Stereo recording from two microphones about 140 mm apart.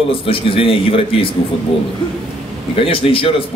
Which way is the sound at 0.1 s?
40° left (ahead or behind).